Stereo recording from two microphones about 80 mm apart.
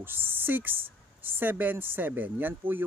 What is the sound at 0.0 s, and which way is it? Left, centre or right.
Speech, right.